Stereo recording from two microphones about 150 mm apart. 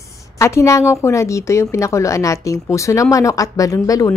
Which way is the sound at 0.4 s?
20° left (ahead or behind).